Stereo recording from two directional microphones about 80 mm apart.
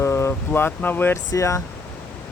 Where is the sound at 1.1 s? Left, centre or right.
Left.